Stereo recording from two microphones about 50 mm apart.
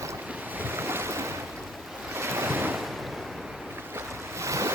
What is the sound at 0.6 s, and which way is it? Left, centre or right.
Waves, right.